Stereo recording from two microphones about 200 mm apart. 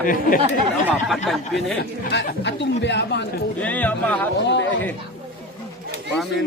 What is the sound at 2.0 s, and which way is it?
Speech, 55° left (ahead or behind).